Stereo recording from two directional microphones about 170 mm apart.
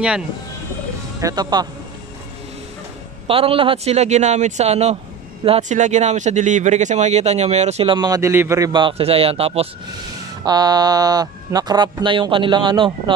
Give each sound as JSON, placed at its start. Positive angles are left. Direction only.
{"t": 1.2, "sound": "speech", "side_deg": -25}
{"t": 3.3, "sound": "speech", "side_deg": -30}
{"t": 10.4, "sound": "speech", "side_deg": -25}